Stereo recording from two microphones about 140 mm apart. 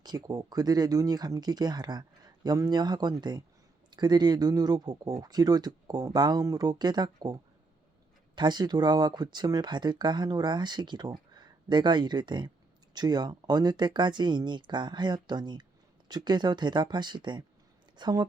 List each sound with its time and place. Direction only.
0.0 s speech: 25° right (ahead or behind)
8.4 s speech: 30° right (ahead or behind)